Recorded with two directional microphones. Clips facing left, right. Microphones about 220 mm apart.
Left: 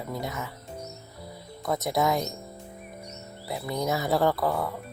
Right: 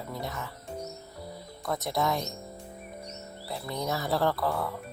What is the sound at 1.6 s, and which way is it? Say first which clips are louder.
Speech: left 4 dB; 20° left (ahead or behind).